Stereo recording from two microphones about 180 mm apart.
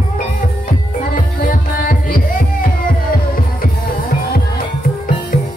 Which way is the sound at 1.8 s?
50° left (ahead or behind).